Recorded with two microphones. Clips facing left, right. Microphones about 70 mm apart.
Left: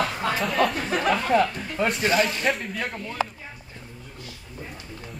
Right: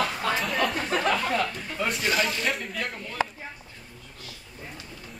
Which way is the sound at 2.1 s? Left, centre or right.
Centre.